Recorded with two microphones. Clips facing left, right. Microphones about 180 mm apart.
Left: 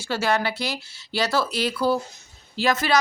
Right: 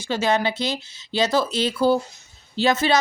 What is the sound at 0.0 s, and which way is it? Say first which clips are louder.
A woman's voice: right 2 dB; 20° right (ahead or behind).